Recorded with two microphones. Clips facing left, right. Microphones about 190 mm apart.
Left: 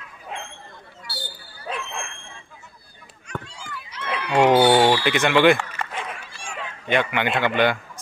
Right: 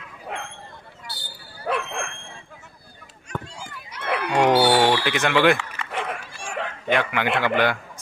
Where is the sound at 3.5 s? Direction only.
50° right (ahead or behind).